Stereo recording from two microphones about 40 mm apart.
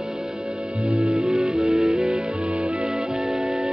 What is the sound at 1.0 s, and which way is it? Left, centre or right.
Music, right.